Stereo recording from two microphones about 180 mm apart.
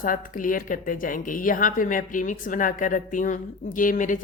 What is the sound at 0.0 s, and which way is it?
Speech, 50° left (ahead or behind).